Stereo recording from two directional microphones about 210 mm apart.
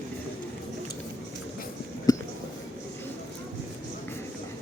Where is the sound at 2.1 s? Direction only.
20° left (ahead or behind).